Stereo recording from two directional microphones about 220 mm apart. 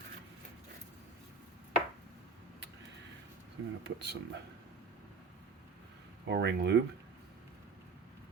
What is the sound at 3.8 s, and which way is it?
Speech, 50° right (ahead or behind).